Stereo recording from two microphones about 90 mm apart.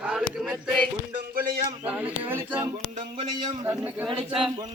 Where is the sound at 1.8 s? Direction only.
20° right (ahead or behind).